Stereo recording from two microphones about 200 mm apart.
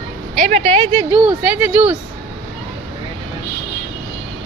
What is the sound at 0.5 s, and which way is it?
Speech, 30° right (ahead or behind).